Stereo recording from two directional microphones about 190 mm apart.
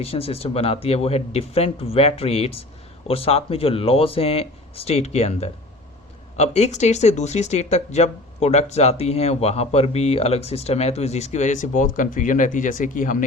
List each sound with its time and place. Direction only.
0.0 s speech: 30° left (ahead or behind)